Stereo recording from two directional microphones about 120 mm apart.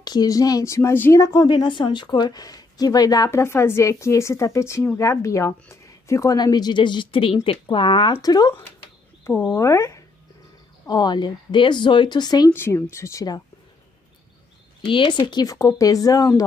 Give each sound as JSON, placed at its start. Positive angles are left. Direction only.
{"t": 0.0, "sound": "speech", "side_deg": 35}
{"t": 1.5, "sound": "speech", "side_deg": 40}
{"t": 12.5, "sound": "speech", "side_deg": 20}
{"t": 14.8, "sound": "speech", "side_deg": 45}